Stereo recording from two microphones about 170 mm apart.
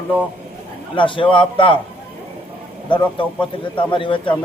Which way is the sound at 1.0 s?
30° left (ahead or behind).